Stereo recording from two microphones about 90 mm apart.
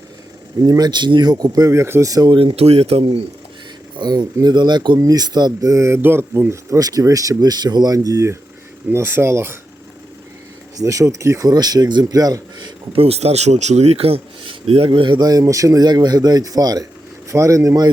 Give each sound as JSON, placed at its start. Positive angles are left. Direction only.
{"t": 0.6, "sound": "speech", "side_deg": -45}
{"t": 2.2, "sound": "speech", "side_deg": -70}
{"t": 3.9, "sound": "speech", "side_deg": -55}
{"t": 4.9, "sound": "speech", "side_deg": -45}
{"t": 8.9, "sound": "speech", "side_deg": -25}
{"t": 10.8, "sound": "speech", "side_deg": -35}
{"t": 13.2, "sound": "a man's voice", "side_deg": -90}
{"t": 14.8, "sound": "speech", "side_deg": -65}
{"t": 15.2, "sound": "speech", "side_deg": -45}